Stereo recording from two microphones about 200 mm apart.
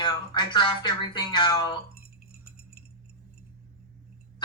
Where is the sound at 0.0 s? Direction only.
20° left (ahead or behind).